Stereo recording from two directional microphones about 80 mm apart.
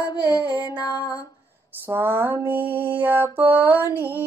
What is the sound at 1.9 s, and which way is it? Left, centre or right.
Mantra, right.